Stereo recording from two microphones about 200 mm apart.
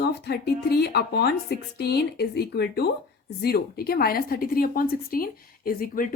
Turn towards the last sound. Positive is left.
turn(degrees=45)  # may be behind; listen again after turning